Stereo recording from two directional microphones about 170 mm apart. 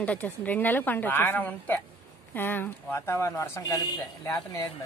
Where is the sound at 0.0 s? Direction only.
10° left (ahead or behind).